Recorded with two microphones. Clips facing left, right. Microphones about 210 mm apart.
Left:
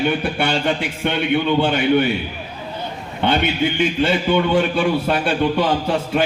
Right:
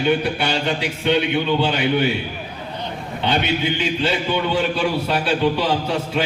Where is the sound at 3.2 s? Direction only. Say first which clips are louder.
Left 2 dB; 55° left (ahead or behind).